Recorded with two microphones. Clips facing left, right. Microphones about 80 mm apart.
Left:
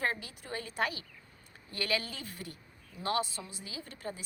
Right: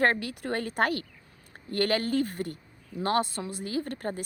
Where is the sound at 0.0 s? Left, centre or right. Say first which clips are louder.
Right 10 dB; right.